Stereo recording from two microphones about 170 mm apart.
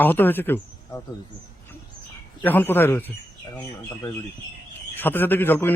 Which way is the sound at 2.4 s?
10° left (ahead or behind).